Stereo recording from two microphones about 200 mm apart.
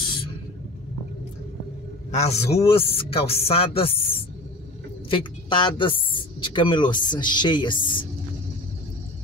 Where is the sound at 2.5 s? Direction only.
30° left (ahead or behind).